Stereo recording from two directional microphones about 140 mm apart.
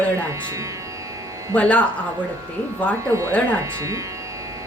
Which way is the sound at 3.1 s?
20° right (ahead or behind).